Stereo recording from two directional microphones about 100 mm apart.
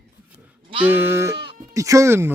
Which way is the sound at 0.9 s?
20° right (ahead or behind).